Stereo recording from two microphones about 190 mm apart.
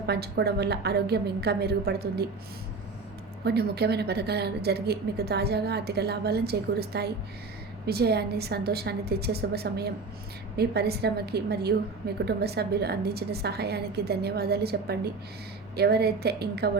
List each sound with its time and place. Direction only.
0.1 s a woman's voice: 60° right (ahead or behind)
3.4 s a woman's voice: 60° right (ahead or behind)